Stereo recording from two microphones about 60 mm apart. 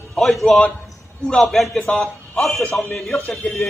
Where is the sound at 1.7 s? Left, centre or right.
Centre.